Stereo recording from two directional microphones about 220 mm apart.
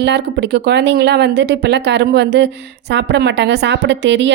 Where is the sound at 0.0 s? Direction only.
50° right (ahead or behind).